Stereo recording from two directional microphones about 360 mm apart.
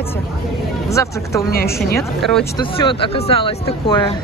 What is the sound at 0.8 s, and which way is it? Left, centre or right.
A woman's voice, centre.